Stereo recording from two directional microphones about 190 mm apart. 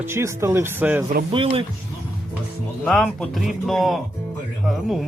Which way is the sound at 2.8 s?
Centre (ahead or behind).